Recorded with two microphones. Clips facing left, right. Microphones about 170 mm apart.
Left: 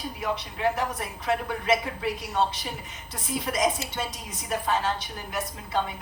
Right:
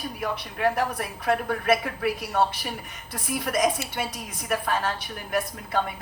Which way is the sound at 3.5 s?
60° right (ahead or behind).